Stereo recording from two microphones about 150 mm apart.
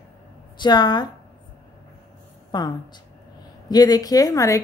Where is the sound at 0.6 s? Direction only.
30° left (ahead or behind).